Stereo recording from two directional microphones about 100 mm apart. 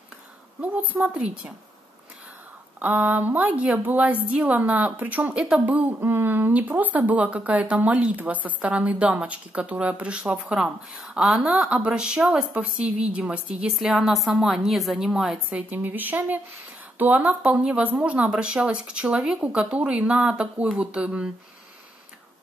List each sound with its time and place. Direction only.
0.6 s speech: 15° right (ahead or behind)
2.8 s speech: 15° right (ahead or behind)
15.7 s speech: 20° right (ahead or behind)